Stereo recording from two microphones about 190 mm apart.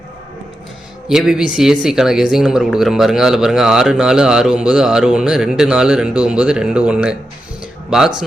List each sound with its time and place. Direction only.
1.0 s a man's voice: 5° right (ahead or behind)